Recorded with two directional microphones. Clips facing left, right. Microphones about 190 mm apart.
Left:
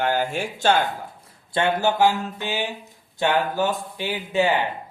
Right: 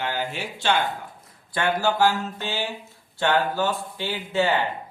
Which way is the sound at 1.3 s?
25° left (ahead or behind).